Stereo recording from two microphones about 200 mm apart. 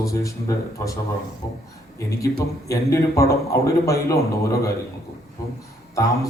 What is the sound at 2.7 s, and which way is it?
A man's voice, 15° left (ahead or behind).